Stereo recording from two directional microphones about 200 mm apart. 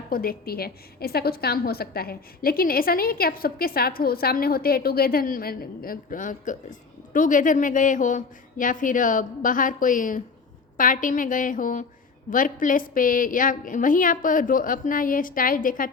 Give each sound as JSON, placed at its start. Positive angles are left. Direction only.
{"t": 0.1, "sound": "a woman's voice", "side_deg": 50}